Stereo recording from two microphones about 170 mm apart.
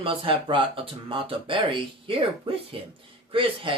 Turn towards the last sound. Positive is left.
turn(degrees=-30)  # may be behind; listen again after turning